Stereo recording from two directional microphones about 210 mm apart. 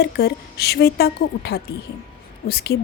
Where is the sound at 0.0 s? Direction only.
50° left (ahead or behind).